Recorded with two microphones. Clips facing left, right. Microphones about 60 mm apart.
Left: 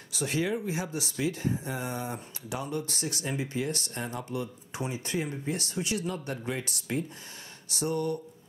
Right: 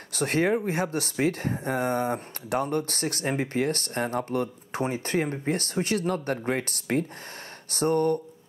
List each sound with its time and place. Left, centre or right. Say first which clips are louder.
0.1 s speech: right 6 dB; right